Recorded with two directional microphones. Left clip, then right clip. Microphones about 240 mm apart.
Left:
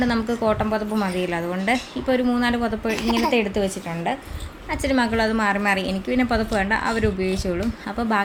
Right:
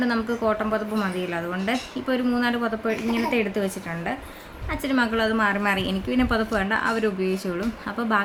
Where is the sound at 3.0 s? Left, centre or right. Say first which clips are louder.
Left 4 dB; left.